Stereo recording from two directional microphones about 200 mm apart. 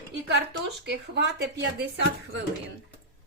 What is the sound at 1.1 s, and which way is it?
Speech, 60° right (ahead or behind).